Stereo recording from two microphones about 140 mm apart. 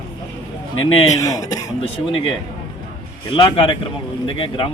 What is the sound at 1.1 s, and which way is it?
Speech, 25° left (ahead or behind).